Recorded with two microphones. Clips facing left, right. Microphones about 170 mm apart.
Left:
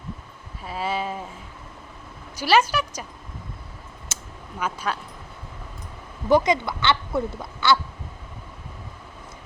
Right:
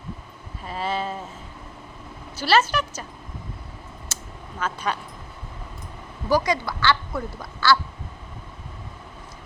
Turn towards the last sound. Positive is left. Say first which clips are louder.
# even
turn(degrees=20)  # may be behind; listen again after turning